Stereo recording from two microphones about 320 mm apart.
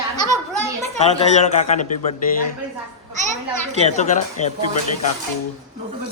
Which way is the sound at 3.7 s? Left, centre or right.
Centre.